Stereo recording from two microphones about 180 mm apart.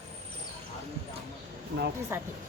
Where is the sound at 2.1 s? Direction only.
15° right (ahead or behind).